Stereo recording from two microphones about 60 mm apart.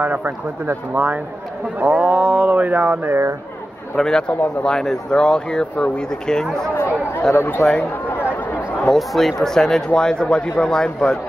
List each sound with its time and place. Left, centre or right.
0.0 s speech: right
3.9 s a man's voice: centre
4.3 s speech: left
7.3 s a man's voice: left
8.9 s speech: centre